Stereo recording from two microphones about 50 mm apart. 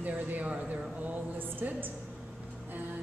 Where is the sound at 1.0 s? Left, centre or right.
Right.